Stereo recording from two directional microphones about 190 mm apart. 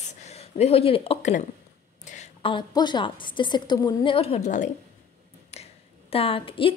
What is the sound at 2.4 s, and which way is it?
A woman's voice, 25° left (ahead or behind).